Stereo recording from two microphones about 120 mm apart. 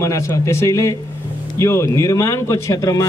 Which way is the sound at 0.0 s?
25° left (ahead or behind).